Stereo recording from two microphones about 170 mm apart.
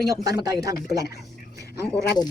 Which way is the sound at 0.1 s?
20° right (ahead or behind).